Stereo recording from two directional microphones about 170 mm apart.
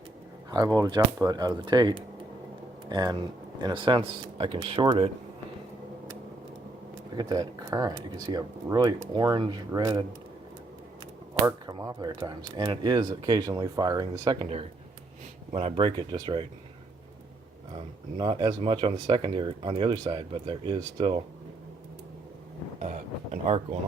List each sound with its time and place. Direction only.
0.5 s speech: 20° right (ahead or behind)
7.2 s speech: 25° right (ahead or behind)
11.4 s speech: 20° right (ahead or behind)
15.5 s speech: 35° right (ahead or behind)
18.2 s speech: 25° right (ahead or behind)
22.8 s a sound: 40° right (ahead or behind)